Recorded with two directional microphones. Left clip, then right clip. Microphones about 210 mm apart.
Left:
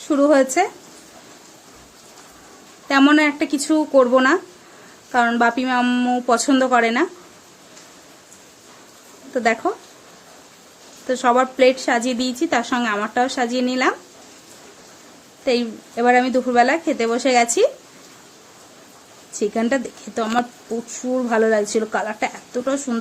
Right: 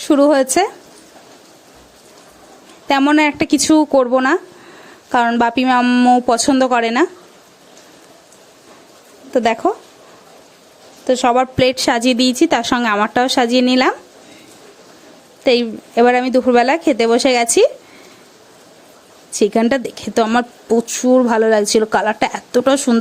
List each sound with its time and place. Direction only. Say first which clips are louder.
0.1 s speech: right 3 dB; 45° right (ahead or behind)
2.8 s speech: right 2 dB; 40° right (ahead or behind)
9.3 s speech: right 4 dB; 40° right (ahead or behind)
11.0 s speech: right 3 dB; 35° right (ahead or behind)
15.4 s speech: right 6 dB; 45° right (ahead or behind)
19.3 s speech: right 6 dB; 50° right (ahead or behind)